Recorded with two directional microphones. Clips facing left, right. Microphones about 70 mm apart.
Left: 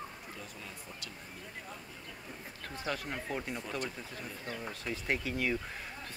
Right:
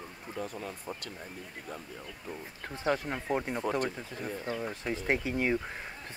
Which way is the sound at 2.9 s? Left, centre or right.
Right.